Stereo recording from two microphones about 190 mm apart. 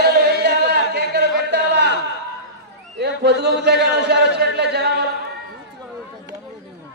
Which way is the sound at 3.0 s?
60° right (ahead or behind).